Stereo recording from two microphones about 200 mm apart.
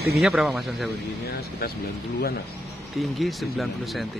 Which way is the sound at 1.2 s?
50° left (ahead or behind).